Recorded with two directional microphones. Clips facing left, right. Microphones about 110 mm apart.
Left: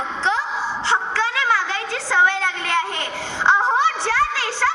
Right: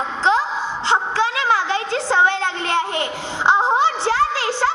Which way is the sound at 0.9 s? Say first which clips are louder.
Right 3 dB; 20° right (ahead or behind).